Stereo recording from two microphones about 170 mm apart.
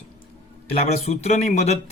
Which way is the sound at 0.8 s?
40° left (ahead or behind).